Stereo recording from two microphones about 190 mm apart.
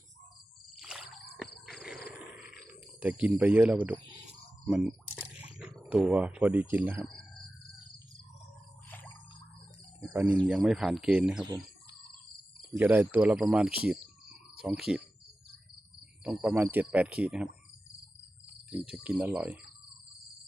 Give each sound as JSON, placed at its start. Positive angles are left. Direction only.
{"t": 0.8, "sound": "a sound", "side_deg": -5}
{"t": 4.6, "sound": "speech", "side_deg": -5}
{"t": 10.1, "sound": "speech", "side_deg": -10}
{"t": 11.4, "sound": "a sound", "side_deg": -20}
{"t": 12.7, "sound": "speech", "side_deg": -10}
{"t": 16.2, "sound": "speech", "side_deg": -5}
{"t": 18.7, "sound": "speech", "side_deg": -5}